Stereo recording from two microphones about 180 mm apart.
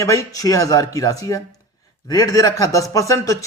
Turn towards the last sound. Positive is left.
turn(degrees=20)  # may be behind; listen again after turning